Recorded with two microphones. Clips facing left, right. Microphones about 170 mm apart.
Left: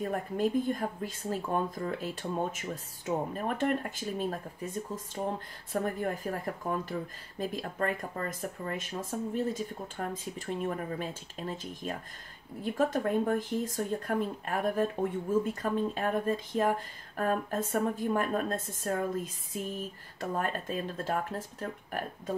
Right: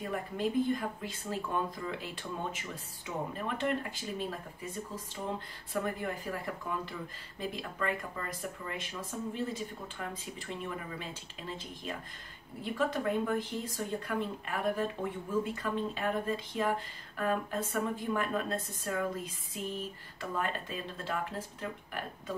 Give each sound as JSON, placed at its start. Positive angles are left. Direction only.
{"t": 0.1, "sound": "speech", "side_deg": 45}
{"t": 5.7, "sound": "speech", "side_deg": 45}
{"t": 20.2, "sound": "speech", "side_deg": 45}